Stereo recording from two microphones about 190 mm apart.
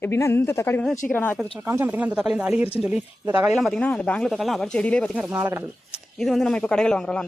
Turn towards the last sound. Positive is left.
turn(degrees=5)  # may be behind; listen again after turning